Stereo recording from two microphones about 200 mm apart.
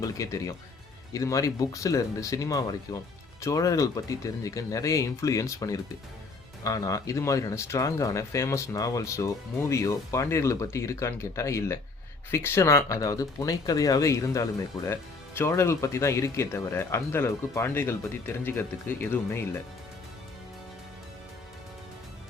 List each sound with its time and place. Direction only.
0.0 s speech: 15° left (ahead or behind)